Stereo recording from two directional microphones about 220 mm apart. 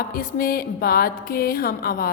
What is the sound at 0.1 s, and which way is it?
A woman's voice, 40° left (ahead or behind).